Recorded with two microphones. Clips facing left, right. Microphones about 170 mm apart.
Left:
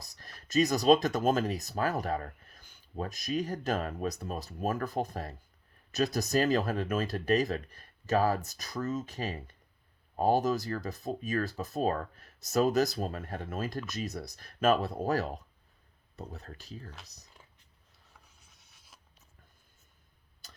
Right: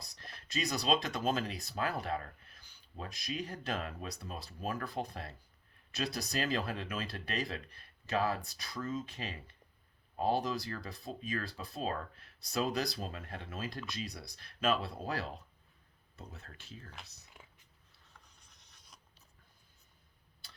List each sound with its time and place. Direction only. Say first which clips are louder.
0.0 s speech: even; 45° left (ahead or behind)
18.3 s a sound: left 1 dB; 5° left (ahead or behind)
20.4 s tick-tock: left 4 dB; 45° left (ahead or behind)